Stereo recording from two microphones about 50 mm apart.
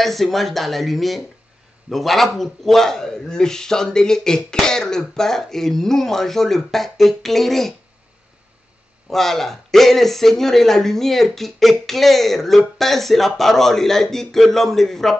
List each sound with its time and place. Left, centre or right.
0.0 s a man's voice: centre
9.1 s speech: centre